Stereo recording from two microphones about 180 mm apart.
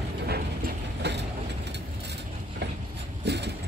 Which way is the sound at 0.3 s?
65° right (ahead or behind).